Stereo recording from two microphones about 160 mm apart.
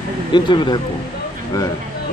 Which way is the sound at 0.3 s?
30° left (ahead or behind).